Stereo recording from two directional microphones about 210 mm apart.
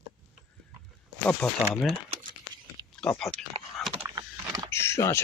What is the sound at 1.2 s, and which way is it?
Speech, 5° left (ahead or behind).